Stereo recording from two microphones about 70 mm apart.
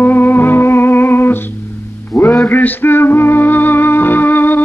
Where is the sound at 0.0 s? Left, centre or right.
Left.